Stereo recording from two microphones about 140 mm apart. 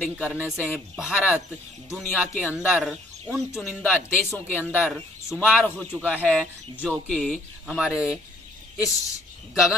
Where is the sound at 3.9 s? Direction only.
15° left (ahead or behind).